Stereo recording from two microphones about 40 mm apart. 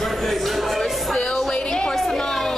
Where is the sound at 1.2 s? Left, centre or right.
Centre.